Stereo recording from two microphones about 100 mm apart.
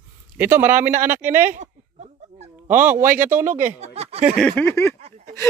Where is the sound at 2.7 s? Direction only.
20° right (ahead or behind).